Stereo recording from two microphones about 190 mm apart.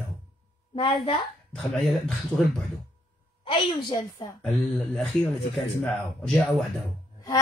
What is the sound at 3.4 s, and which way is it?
Speech, 25° left (ahead or behind).